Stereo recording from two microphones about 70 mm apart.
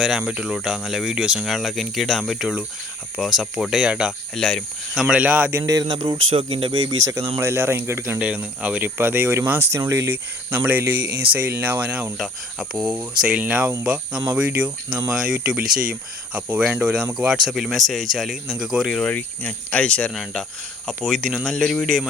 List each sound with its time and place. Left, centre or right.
0.0 s speech: centre
4.4 s speech: centre
5.0 s speech: centre
5.6 s speech: right
7.0 s speech: right
7.3 s speech: right
8.2 s speech: centre; by 10.2 s right
10.5 s speech: right
12.1 s speech: centre
12.9 s speech: centre
19.0 s speech: left; by 22.0 s centre